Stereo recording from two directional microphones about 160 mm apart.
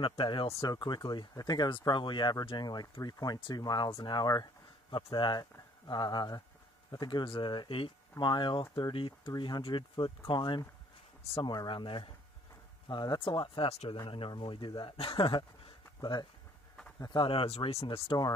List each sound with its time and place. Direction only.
0.0 s speech: 30° left (ahead or behind)